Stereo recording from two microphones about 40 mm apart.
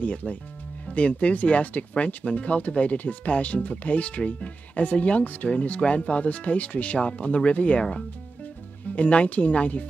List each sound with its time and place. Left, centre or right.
0.0 s speech: left
8.9 s speech: left